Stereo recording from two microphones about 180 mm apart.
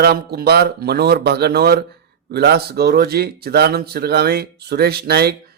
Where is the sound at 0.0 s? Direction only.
60° right (ahead or behind).